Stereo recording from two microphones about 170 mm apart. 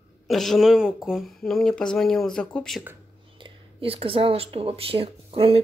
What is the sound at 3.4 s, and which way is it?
Speech, 30° right (ahead or behind).